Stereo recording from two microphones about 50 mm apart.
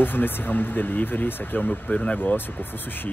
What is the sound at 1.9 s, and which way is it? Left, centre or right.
Speech, centre.